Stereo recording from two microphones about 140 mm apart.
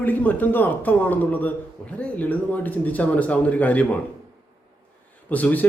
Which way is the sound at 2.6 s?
10° left (ahead or behind).